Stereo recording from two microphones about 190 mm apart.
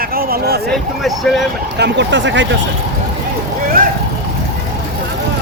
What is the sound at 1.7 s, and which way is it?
Speech, 65° right (ahead or behind).